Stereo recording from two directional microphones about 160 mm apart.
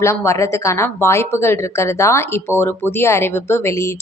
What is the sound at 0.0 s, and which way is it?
A woman's voice, 15° left (ahead or behind).